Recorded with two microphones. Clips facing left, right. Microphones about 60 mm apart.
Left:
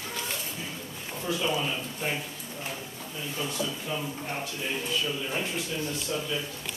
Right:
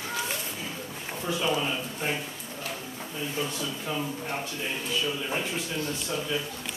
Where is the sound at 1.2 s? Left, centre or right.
Centre.